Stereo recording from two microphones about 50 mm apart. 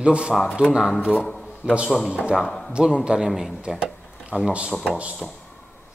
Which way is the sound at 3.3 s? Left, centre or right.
Centre.